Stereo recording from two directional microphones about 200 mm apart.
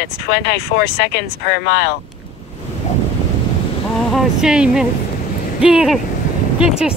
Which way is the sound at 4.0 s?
Centre (ahead or behind).